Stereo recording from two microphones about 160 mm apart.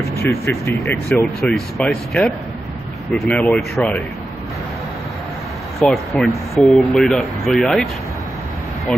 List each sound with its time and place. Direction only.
0.2 s speech: 15° left (ahead or behind)
1.4 s speech: centre (ahead or behind)
5.8 s speech: centre (ahead or behind)